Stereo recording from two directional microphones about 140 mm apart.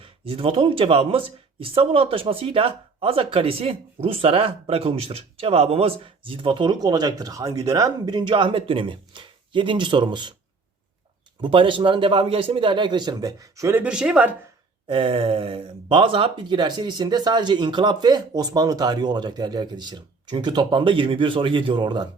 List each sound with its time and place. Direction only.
0.0 s speech: 40° right (ahead or behind)
11.3 s speech: 35° right (ahead or behind); by 13.8 s 20° right (ahead or behind)
13.8 s speech: 5° right (ahead or behind)
14.8 s speech: 40° right (ahead or behind)